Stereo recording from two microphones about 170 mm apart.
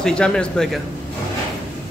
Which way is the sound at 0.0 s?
5° left (ahead or behind).